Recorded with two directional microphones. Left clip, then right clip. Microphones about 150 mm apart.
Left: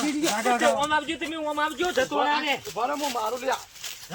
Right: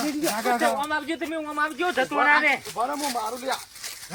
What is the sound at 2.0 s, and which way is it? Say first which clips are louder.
Speech: right 4 dB; 20° right (ahead or behind).